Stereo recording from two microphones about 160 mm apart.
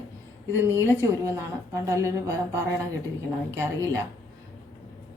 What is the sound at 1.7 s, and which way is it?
Speech, 15° right (ahead or behind).